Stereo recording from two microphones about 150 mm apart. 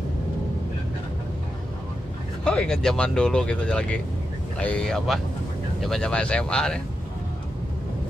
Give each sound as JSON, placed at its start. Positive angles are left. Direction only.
{"t": 2.4, "sound": "speech", "side_deg": 5}